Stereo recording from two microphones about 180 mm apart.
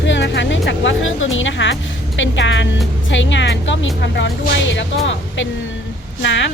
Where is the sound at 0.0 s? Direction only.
90° left.